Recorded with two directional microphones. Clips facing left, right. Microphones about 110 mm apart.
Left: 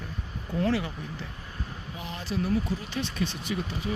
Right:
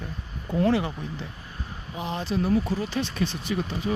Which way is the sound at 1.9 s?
25° right (ahead or behind).